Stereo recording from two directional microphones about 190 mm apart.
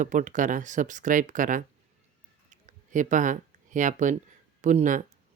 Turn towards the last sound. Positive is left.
turn(degrees=-40)  # may be behind; listen again after turning